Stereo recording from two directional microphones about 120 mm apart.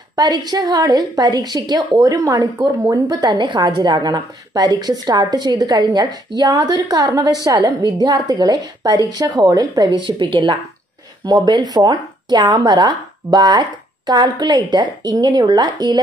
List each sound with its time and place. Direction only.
0.1 s a woman's voice: 35° right (ahead or behind)